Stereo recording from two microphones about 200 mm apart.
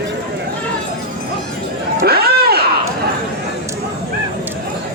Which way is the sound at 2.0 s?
50° right (ahead or behind).